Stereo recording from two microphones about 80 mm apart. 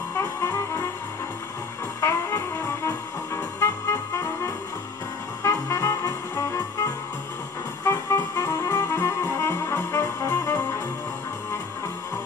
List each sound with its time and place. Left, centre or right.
0.2 s brass instrument: left
2.0 s music: left
7.8 s music: left